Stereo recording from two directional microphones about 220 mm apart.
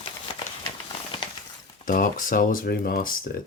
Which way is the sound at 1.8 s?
35° left (ahead or behind).